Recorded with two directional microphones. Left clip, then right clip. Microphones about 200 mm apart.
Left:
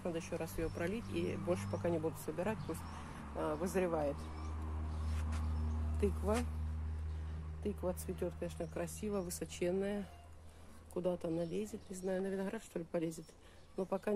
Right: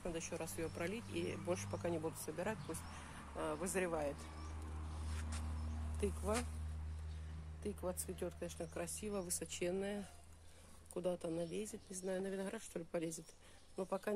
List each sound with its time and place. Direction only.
0.0 s speech: 15° right (ahead or behind)
5.9 s speech: 10° right (ahead or behind)
7.6 s speech: 10° right (ahead or behind)